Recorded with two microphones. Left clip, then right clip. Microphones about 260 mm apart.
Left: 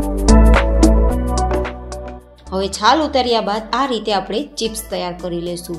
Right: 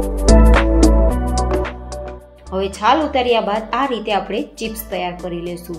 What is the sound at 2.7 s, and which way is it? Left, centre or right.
A woman's voice, left.